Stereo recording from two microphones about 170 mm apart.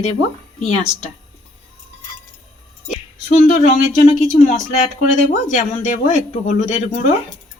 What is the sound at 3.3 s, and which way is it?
Speech, 45° left (ahead or behind).